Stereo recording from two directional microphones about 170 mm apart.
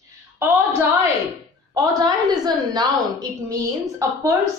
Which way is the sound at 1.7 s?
25° right (ahead or behind).